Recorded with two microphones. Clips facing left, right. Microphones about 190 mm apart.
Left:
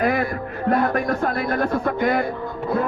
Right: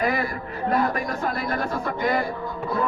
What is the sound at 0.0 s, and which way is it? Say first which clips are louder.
A man's voice: left 4 dB; 50° left (ahead or behind).